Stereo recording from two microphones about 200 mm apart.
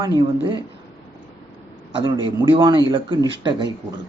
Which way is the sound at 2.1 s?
20° right (ahead or behind).